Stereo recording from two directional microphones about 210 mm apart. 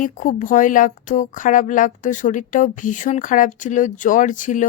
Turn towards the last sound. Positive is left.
turn(degrees=35)  # may be behind; listen again after turning